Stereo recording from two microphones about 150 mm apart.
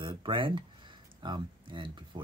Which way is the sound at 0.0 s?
30° right (ahead or behind).